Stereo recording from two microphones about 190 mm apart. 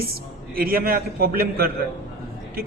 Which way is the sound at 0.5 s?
50° right (ahead or behind).